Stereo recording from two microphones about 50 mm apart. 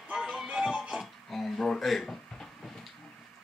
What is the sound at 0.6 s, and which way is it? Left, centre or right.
Music, centre.